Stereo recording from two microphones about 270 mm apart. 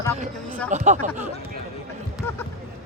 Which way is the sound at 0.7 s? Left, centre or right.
Right.